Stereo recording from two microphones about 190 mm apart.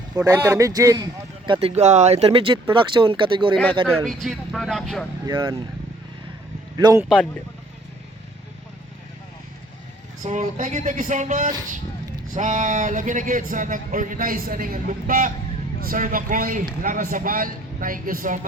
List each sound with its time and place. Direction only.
0.3 s speech: 15° right (ahead or behind)
3.8 s speech: centre (ahead or behind)
5.2 s speech: 15° right (ahead or behind)
6.7 s a man's voice: 20° right (ahead or behind)
10.2 s a man's voice: 40° right (ahead or behind)